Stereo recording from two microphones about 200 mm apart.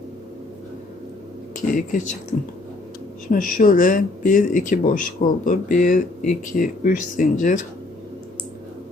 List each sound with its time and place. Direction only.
1.5 s speech: 40° left (ahead or behind)
3.3 s speech: 45° left (ahead or behind)